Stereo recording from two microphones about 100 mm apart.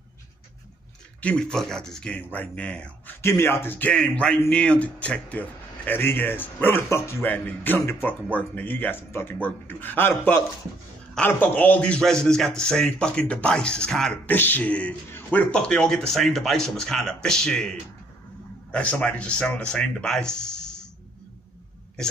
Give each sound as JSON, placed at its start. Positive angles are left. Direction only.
{"t": 1.2, "sound": "speech", "side_deg": 10}
{"t": 3.2, "sound": "a man's voice", "side_deg": 25}
{"t": 14.2, "sound": "speech", "side_deg": 20}
{"t": 15.0, "sound": "a sound", "side_deg": 20}
{"t": 15.5, "sound": "speech", "side_deg": 5}